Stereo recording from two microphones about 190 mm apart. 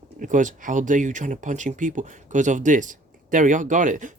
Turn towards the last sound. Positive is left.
turn(degrees=-40)  # may be behind; listen again after turning